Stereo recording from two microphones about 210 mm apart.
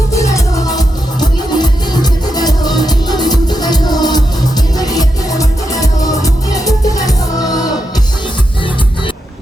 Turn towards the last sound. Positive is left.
turn(degrees=20)  # may be behind; listen again after turning